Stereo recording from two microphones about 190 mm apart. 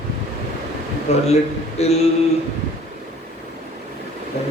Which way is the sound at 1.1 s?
35° left (ahead or behind).